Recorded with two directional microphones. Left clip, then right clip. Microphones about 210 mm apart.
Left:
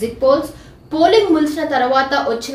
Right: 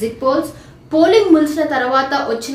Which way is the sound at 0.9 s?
15° right (ahead or behind).